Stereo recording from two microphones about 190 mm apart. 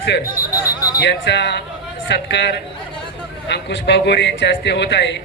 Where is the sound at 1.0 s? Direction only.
65° left (ahead or behind).